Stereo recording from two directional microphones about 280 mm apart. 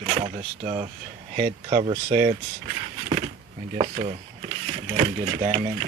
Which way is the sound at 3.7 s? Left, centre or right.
Right.